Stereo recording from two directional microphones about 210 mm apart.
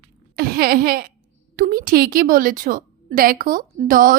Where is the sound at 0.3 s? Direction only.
45° right (ahead or behind).